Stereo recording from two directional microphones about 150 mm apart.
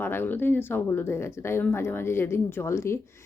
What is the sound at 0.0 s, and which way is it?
Speech, 15° left (ahead or behind).